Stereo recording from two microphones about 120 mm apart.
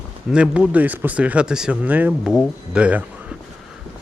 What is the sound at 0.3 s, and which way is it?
Speech, 10° right (ahead or behind).